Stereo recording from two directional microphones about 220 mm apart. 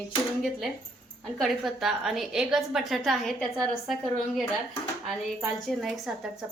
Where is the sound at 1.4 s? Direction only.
Centre (ahead or behind).